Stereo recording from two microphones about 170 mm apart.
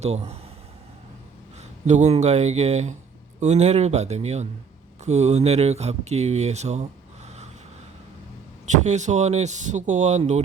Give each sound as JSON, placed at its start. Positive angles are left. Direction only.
{"t": 0.0, "sound": "speech", "side_deg": -40}
{"t": 1.9, "sound": "speech", "side_deg": -40}
{"t": 8.8, "sound": "speech", "side_deg": -45}